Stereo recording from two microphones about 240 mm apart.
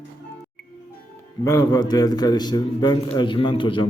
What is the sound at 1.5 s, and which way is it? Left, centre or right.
A man's voice, centre.